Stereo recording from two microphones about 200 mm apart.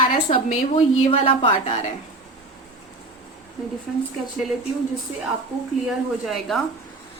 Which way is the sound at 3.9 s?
Centre (ahead or behind).